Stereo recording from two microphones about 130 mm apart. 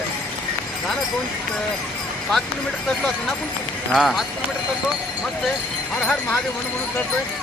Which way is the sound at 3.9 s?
Centre (ahead or behind).